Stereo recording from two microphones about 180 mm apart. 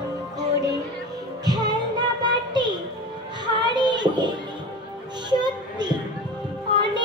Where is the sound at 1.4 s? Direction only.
20° right (ahead or behind).